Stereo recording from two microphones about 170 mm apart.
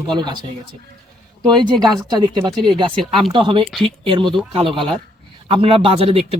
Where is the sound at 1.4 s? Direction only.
25° right (ahead or behind).